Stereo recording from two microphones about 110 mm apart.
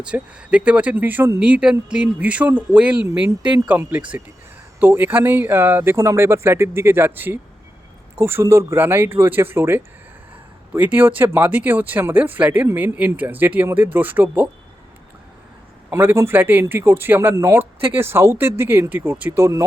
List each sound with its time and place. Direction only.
0.0 s a man's voice: 10° right (ahead or behind)
15.9 s a man's voice: 20° right (ahead or behind)